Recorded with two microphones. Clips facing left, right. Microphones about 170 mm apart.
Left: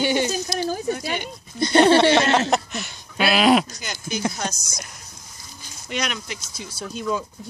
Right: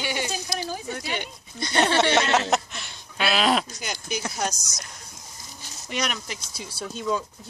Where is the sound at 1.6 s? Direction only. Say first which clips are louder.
Left 8 dB; 25° left (ahead or behind).